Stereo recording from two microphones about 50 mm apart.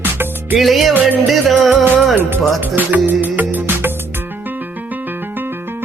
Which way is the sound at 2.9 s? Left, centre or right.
Right.